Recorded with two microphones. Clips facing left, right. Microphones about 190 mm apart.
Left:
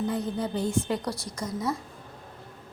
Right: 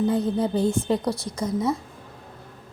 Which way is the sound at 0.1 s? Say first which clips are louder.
Right 6 dB; 30° right (ahead or behind).